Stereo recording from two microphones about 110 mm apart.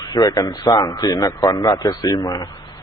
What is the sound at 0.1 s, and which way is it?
A man's voice, 35° left (ahead or behind).